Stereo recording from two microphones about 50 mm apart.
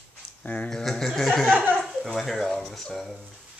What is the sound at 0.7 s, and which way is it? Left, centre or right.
Speech, centre.